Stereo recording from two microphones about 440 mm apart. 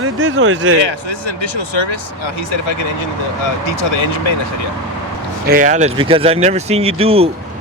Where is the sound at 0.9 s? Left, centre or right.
Left.